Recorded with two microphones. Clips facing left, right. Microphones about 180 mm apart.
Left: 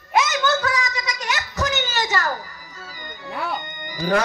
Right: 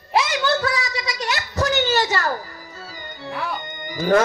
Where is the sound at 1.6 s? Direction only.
40° right (ahead or behind).